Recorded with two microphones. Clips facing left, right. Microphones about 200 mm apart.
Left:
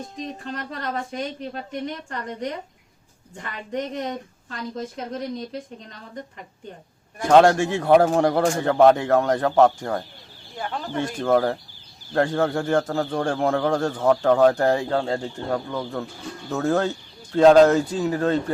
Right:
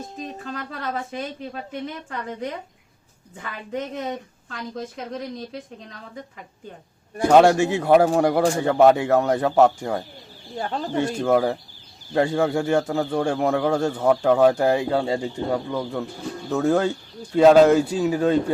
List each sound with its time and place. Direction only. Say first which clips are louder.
0.2 s speech: left 1 dB; 5° right (ahead or behind)
3.7 s speech: left 1 dB; 5° right (ahead or behind)
7.3 s speech: right 1 dB; 10° right (ahead or behind)
10.6 s speech: right 3 dB; 35° right (ahead or behind)
10.9 s speech: right 1 dB; 10° right (ahead or behind)